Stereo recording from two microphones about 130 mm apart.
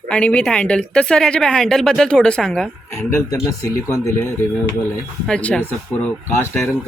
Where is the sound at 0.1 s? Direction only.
10° left (ahead or behind).